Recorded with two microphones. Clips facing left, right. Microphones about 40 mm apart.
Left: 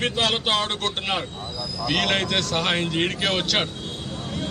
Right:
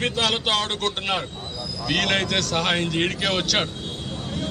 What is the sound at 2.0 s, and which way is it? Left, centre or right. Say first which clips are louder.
A man's voice: right 1 dB; centre.